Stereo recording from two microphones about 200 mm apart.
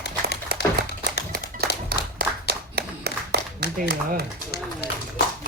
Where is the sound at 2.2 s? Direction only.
50° right (ahead or behind).